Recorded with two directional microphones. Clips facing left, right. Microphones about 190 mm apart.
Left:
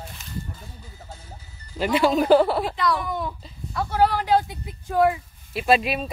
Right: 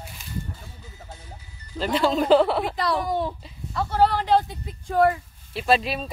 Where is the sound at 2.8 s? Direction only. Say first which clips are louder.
Right 1 dB; 35° right (ahead or behind).